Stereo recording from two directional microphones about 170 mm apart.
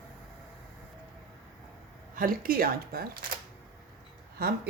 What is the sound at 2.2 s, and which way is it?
Speech, 55° right (ahead or behind).